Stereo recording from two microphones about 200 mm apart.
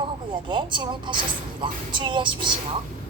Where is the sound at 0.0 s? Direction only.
25° right (ahead or behind).